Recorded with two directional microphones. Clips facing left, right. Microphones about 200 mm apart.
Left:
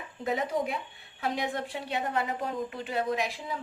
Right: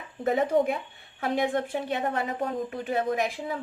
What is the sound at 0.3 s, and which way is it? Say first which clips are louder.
A woman's voice: right 6 dB; 50° right (ahead or behind).